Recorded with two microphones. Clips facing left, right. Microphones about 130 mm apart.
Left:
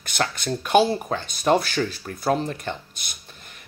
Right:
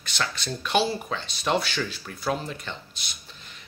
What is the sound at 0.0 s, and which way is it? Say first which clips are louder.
Speech: left 5 dB; 50° left (ahead or behind).